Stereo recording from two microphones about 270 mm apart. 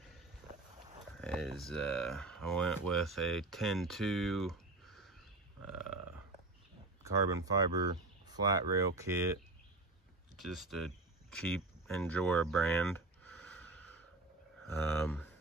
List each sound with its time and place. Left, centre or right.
1.2 s speech: centre
7.0 s speech: centre
10.3 s cricket: centre
14.7 s speech: centre